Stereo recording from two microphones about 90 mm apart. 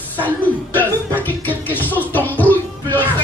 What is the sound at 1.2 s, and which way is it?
Music, 20° left (ahead or behind).